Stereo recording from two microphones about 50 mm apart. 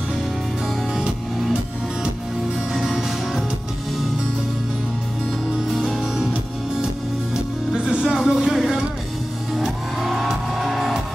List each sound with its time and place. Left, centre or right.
2.7 s music: centre
5.7 s music: centre
7.7 s music: centre